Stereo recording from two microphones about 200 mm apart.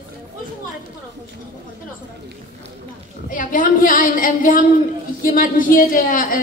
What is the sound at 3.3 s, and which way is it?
A man's voice, 45° left (ahead or behind).